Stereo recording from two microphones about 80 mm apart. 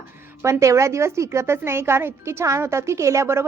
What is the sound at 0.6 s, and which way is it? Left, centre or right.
A woman's voice, right.